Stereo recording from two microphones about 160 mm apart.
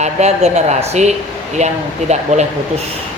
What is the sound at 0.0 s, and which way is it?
A man's voice, 45° right (ahead or behind).